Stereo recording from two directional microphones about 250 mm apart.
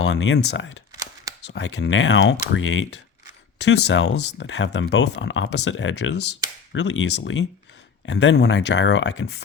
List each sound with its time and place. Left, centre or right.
0.0 s speech: left